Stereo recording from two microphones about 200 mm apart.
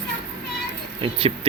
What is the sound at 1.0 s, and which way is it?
Speech, 30° right (ahead or behind).